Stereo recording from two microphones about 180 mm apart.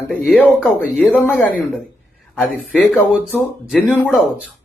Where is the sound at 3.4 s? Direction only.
Centre (ahead or behind).